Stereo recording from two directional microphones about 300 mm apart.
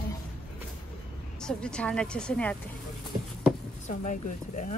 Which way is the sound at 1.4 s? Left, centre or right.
Centre.